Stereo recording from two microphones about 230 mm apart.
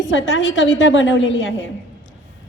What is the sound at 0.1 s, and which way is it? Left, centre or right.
A woman's voice, left.